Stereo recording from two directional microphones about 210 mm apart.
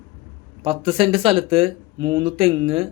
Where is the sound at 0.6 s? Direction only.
25° right (ahead or behind).